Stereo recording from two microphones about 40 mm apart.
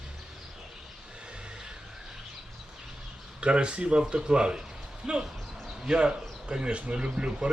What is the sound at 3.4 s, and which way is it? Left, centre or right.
Speech, right.